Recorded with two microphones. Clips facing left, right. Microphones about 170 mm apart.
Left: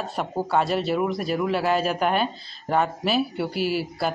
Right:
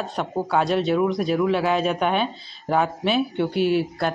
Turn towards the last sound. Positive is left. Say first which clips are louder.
# right 4 dB
turn(degrees=5)  # may be behind; listen again after turning